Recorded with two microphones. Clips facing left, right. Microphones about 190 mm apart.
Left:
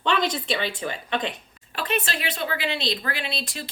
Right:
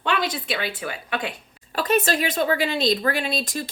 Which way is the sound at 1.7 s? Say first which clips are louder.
Right 6 dB; 40° right (ahead or behind).